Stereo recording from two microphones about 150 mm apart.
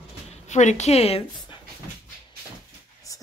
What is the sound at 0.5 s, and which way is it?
Speech, 50° left (ahead or behind).